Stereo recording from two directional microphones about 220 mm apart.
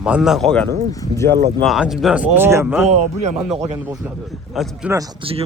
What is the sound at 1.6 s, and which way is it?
Speech, centre (ahead or behind).